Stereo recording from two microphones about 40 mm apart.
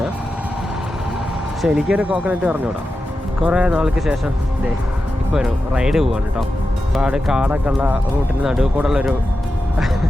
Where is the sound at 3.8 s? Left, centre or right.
Centre.